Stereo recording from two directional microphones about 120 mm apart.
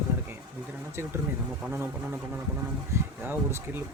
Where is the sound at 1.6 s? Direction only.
15° right (ahead or behind).